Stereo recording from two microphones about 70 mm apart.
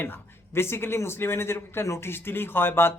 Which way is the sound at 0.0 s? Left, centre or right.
Left.